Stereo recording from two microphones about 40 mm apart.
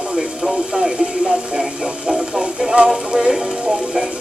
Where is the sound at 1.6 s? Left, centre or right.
Centre.